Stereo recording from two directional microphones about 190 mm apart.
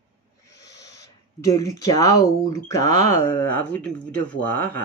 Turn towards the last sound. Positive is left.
turn(degrees=10)  # may be behind; listen again after turning